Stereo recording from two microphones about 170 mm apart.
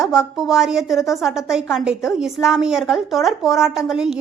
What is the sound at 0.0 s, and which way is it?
A woman's voice, 5° right (ahead or behind).